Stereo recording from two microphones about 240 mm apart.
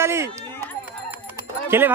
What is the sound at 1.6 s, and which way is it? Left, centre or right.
Speech, centre.